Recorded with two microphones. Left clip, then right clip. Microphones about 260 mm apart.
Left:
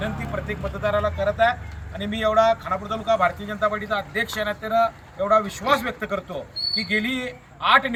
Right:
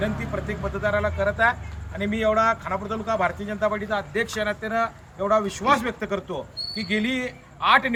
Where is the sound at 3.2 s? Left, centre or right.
Centre.